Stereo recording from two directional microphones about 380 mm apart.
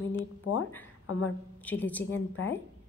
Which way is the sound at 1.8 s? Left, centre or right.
Centre.